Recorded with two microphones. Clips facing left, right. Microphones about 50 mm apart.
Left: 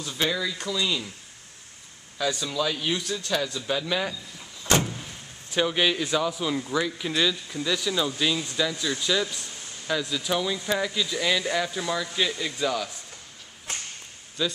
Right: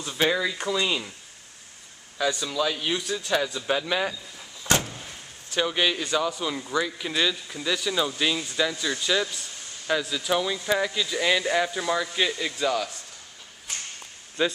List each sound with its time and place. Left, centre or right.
0.0 s speech: centre
2.1 s speech: centre
4.7 s vehicle: centre
5.6 s speech: centre
14.4 s speech: right